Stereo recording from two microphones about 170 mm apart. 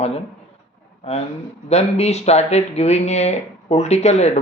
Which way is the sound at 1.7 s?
40° left (ahead or behind).